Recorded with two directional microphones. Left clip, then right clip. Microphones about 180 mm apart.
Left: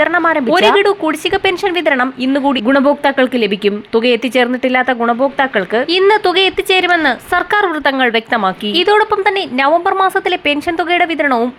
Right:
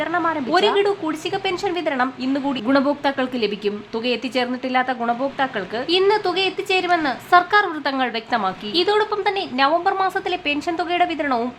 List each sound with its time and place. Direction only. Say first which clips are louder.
0.0 s speech: left 9 dB; 30° left (ahead or behind)